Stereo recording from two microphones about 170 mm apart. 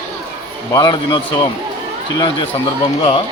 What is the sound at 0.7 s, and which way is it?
Speech, 25° left (ahead or behind).